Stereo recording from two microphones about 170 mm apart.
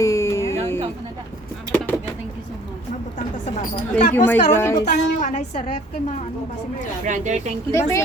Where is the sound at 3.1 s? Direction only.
40° left (ahead or behind).